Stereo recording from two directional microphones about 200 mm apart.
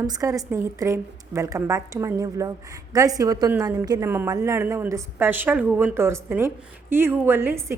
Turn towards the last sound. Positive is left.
turn(degrees=-10)  # may be behind; listen again after turning